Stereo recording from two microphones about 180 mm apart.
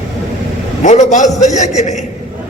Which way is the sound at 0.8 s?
40° left (ahead or behind).